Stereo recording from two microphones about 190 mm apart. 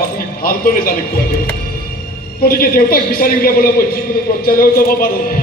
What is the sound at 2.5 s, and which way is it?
A man's voice, 50° left (ahead or behind).